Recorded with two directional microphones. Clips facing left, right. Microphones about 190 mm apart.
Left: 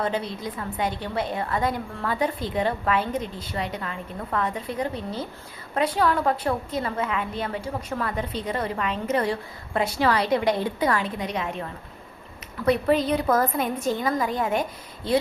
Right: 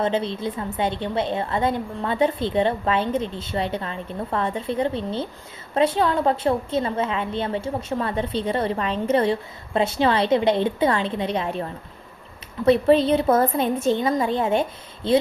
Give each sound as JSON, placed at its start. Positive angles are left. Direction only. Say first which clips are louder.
{"t": 0.0, "sound": "a woman's voice", "louder": "right 4 dB", "side_deg": -25}